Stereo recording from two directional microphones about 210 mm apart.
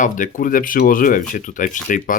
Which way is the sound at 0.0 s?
40° left (ahead or behind).